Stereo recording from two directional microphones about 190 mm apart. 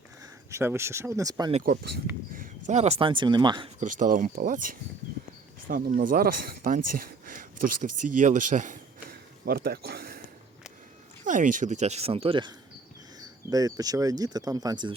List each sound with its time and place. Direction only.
0.2 s speech: 15° right (ahead or behind)
1.6 s speech: 55° right (ahead or behind); by 3.7 s 25° right (ahead or behind)
3.8 s speech: 45° right (ahead or behind)
11.3 s speech: 45° right (ahead or behind); by 14.9 s 20° right (ahead or behind)